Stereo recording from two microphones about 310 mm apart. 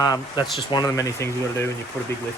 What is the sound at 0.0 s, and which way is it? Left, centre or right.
Speech, centre.